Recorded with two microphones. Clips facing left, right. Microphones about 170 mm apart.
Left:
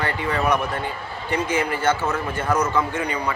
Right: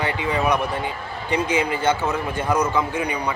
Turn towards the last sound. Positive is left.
turn(degrees=-15)  # may be behind; listen again after turning